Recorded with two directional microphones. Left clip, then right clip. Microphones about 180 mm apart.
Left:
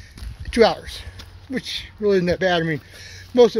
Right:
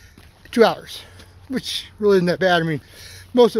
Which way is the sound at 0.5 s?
25° right (ahead or behind).